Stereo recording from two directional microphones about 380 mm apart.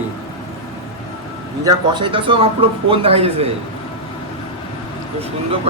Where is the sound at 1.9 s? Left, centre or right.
Centre.